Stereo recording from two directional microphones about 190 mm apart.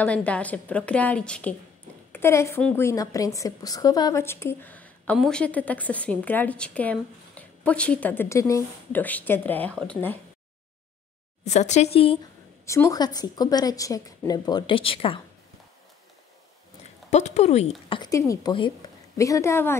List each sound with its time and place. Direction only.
0.0 s a woman's voice: 5° left (ahead or behind)
11.4 s speech: 35° left (ahead or behind)
12.6 s a woman's voice: 15° left (ahead or behind)
17.1 s speech: 35° left (ahead or behind)
17.8 s a woman's voice: 25° left (ahead or behind)